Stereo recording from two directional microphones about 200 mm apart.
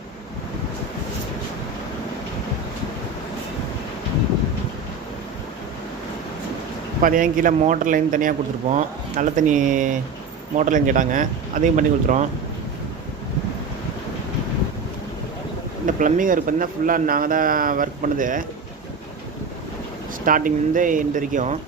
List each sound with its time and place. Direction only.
7.0 s speech: 40° right (ahead or behind)
15.9 s a man's voice: 40° right (ahead or behind)
20.2 s speech: 45° right (ahead or behind)